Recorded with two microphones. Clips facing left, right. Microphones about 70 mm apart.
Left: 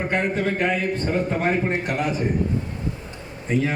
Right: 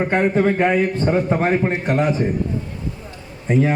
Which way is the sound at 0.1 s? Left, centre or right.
Right.